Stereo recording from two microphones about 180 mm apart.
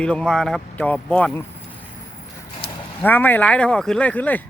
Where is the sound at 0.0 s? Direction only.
5° left (ahead or behind).